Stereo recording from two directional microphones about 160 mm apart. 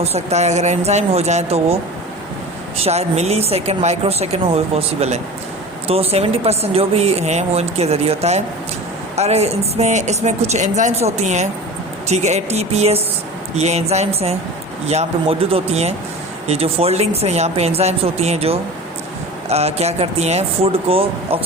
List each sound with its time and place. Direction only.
0.0 s speech: 40° right (ahead or behind)
2.8 s speech: 40° right (ahead or behind)